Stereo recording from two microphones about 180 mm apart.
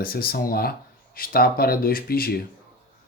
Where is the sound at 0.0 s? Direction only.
55° left (ahead or behind).